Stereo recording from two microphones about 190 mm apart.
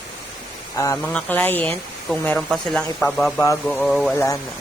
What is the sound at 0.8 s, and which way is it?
Speech, 10° left (ahead or behind).